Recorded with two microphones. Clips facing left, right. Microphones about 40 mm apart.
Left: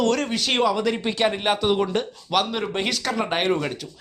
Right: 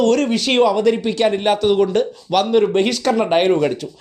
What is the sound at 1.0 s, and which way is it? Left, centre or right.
Speech, centre.